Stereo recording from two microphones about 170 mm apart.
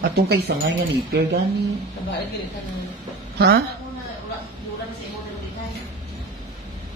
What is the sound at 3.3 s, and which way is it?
Speech, 70° right (ahead or behind).